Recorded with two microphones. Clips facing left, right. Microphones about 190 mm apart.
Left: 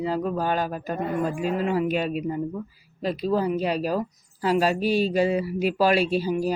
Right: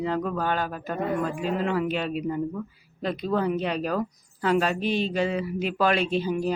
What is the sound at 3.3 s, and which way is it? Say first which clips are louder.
A woman's voice: left 2 dB; 5° left (ahead or behind).